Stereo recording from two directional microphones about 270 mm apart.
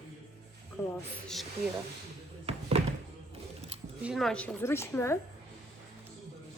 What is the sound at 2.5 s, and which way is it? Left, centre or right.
Music, right.